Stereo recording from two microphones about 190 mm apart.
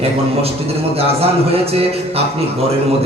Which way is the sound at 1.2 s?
30° right (ahead or behind).